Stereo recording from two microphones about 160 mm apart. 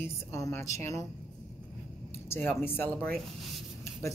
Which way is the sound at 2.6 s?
10° left (ahead or behind).